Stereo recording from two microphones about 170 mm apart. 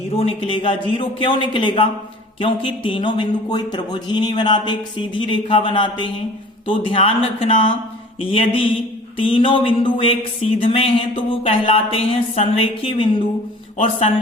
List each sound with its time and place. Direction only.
0.2 s speech: 30° left (ahead or behind)